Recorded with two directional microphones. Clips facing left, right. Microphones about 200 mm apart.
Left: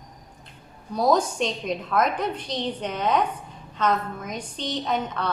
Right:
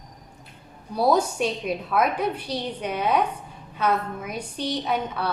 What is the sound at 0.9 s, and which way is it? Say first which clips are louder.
A woman's voice: even; 10° right (ahead or behind).